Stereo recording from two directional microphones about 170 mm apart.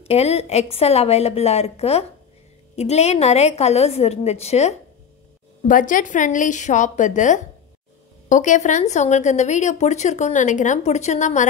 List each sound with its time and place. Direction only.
0.0 s a woman's voice: 35° left (ahead or behind)
5.6 s speech: 50° left (ahead or behind)